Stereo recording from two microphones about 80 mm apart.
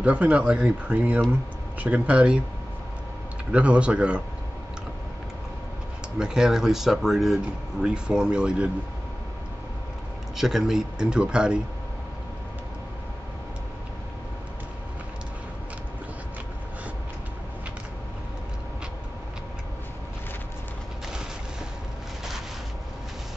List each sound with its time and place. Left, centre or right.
0.0 s speech: centre
3.5 s speech: centre
6.1 s speech: centre
10.3 s speech: centre